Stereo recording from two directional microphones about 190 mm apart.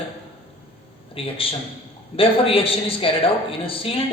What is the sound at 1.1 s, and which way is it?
A man's voice, 30° left (ahead or behind).